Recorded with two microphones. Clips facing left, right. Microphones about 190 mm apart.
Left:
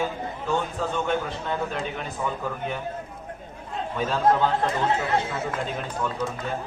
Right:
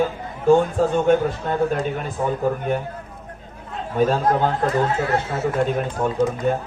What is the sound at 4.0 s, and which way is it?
A man's voice, 45° right (ahead or behind).